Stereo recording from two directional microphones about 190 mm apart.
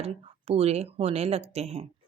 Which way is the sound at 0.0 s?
30° right (ahead or behind).